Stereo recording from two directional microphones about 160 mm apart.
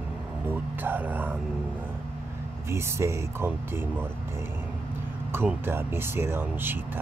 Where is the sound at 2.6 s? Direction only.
15° right (ahead or behind).